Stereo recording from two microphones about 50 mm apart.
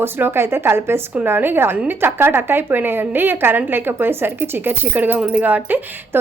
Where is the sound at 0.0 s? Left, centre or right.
Right.